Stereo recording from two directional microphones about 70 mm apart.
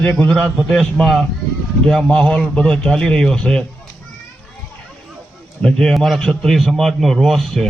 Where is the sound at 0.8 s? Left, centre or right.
Centre.